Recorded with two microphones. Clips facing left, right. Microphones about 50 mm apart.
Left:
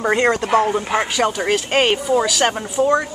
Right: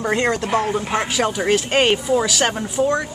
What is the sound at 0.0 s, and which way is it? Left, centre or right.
Speech, centre.